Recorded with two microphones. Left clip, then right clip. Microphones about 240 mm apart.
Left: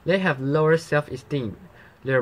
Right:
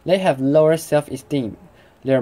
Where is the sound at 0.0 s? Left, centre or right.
Right.